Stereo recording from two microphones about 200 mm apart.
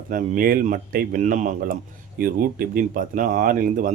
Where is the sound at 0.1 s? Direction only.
40° right (ahead or behind).